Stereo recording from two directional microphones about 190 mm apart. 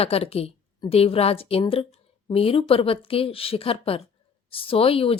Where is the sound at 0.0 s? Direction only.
30° left (ahead or behind).